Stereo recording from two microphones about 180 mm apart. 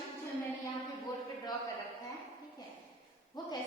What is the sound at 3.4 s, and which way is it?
Speech, 25° left (ahead or behind).